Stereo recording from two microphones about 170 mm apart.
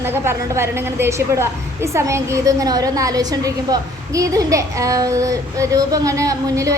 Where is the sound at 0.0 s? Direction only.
15° right (ahead or behind).